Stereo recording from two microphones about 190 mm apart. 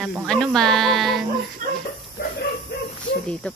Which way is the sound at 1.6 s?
50° right (ahead or behind).